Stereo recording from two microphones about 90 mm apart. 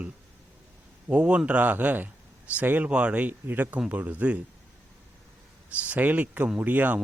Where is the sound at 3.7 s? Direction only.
10° right (ahead or behind).